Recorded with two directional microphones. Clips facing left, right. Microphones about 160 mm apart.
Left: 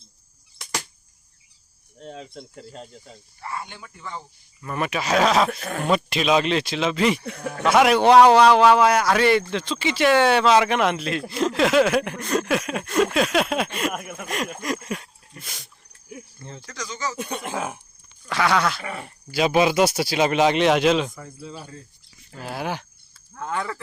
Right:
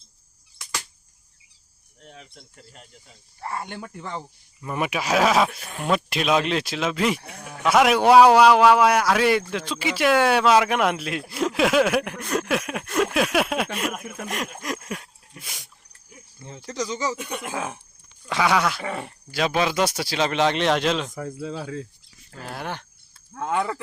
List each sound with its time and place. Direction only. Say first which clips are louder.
2.0 s speech: left 9 dB; 70° left (ahead or behind)
3.4 s speech: right 2 dB; 50° right (ahead or behind)
4.6 s a man's voice: even; 15° right (ahead or behind)
7.3 s speech: left 8 dB; 65° left (ahead or behind)
7.6 s a man's voice: left 1 dB; centre (ahead or behind)
16.6 s speech: right 5 dB; 30° right (ahead or behind)
17.2 s speech: left 2 dB; 30° left (ahead or behind)
18.3 s speech: even; 10° right (ahead or behind)
18.8 s speech: right 3 dB; 25° right (ahead or behind)
19.3 s speech: left 4 dB; 5° left (ahead or behind)
21.2 s speech: right 7 dB; 70° right (ahead or behind); by 21.8 s 90° right
22.3 s a man's voice: left 4 dB; 5° left (ahead or behind)
23.4 s speech: right 4 dB; 15° right (ahead or behind)